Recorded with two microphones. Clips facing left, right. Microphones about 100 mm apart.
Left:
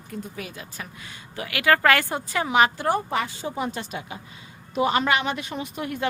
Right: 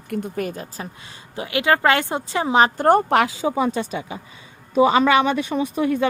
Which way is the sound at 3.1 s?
90° right.